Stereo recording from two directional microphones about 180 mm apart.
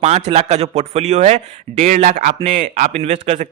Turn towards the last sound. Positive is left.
turn(degrees=-35)  # may be behind; listen again after turning